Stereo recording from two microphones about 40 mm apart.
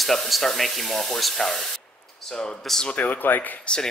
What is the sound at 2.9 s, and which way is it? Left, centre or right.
Speech, left.